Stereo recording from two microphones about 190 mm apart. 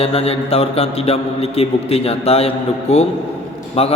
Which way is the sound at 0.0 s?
30° left (ahead or behind).